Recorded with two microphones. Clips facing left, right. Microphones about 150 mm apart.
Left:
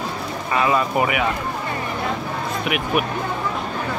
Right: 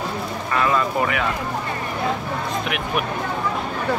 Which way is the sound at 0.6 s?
10° left (ahead or behind).